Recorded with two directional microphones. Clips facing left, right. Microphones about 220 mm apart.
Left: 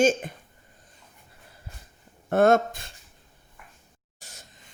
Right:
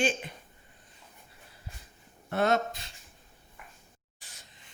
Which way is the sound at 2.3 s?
50° left (ahead or behind).